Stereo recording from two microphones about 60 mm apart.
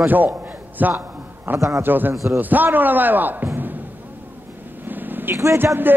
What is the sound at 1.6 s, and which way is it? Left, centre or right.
Speech, right.